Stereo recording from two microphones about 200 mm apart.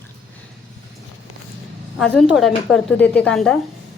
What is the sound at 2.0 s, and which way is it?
A woman's voice, centre (ahead or behind).